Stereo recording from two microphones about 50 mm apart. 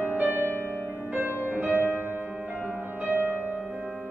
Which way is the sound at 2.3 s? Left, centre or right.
Centre.